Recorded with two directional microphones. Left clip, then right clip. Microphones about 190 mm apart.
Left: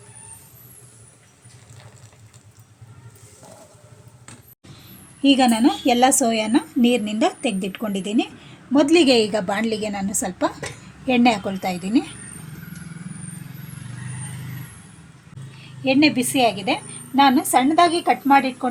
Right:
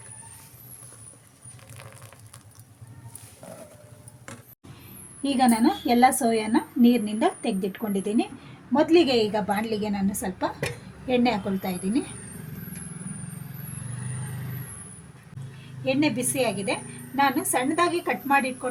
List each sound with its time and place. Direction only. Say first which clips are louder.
5.2 s a woman's voice: left 5 dB; 35° left (ahead or behind)
15.8 s a woman's voice: left 7 dB; 45° left (ahead or behind)